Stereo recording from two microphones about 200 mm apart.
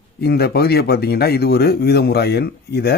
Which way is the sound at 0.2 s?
50° left (ahead or behind).